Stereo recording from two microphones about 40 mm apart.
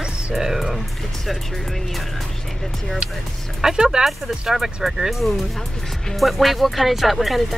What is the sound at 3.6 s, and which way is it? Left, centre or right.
Speech, centre.